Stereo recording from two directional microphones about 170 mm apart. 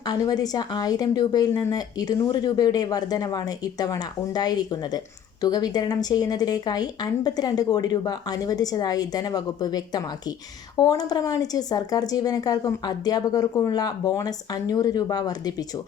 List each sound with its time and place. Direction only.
0.0 s a woman's voice: 25° left (ahead or behind)